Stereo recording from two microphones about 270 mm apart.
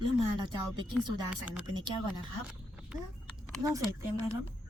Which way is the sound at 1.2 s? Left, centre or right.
Centre.